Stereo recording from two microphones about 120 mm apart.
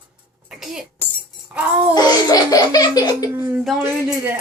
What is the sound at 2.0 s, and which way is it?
Speech, 35° left (ahead or behind).